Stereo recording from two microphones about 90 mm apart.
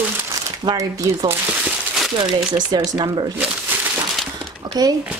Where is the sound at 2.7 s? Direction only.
50° right (ahead or behind).